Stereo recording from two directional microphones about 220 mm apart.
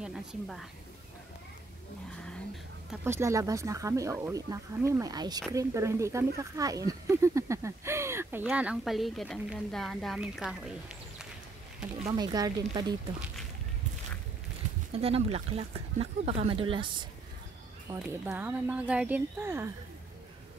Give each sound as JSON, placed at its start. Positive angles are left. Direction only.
{"t": 0.0, "sound": "speech", "side_deg": 0}
{"t": 2.9, "sound": "speech", "side_deg": -10}
{"t": 12.1, "sound": "speech", "side_deg": -20}
{"t": 14.9, "sound": "speech", "side_deg": -25}